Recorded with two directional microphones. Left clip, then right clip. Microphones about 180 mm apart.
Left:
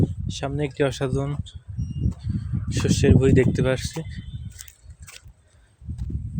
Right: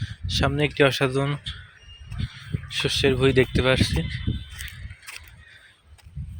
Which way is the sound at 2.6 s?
30° left (ahead or behind).